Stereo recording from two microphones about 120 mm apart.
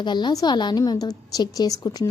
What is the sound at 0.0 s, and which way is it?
A woman's voice, 40° left (ahead or behind).